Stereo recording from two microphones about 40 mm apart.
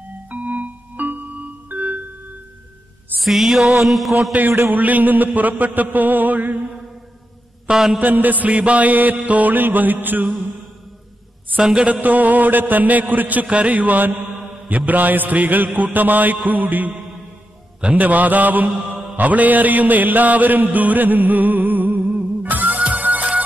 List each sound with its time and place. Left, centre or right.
0.3 s music: right
3.2 s a sound: centre
4.5 s mantra: right
7.6 s mantra: centre
8.0 s mantra: right
11.6 s a sound: right
11.9 s mantra: right
13.5 s a sound: right
14.7 s mantra: right
17.9 s mantra: right
22.4 s music: right
22.8 s music: right